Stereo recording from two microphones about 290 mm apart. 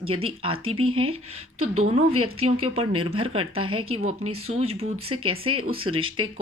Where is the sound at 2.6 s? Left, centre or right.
Right.